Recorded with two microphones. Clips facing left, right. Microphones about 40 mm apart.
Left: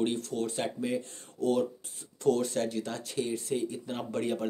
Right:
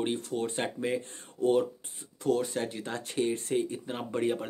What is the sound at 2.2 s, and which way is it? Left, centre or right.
Speech, centre.